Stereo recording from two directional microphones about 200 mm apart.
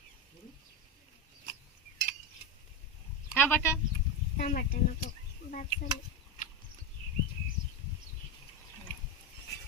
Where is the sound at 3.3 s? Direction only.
10° left (ahead or behind).